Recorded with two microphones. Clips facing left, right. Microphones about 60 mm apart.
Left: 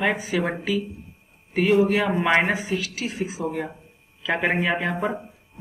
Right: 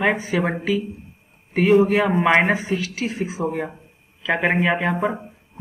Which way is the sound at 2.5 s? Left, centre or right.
Right.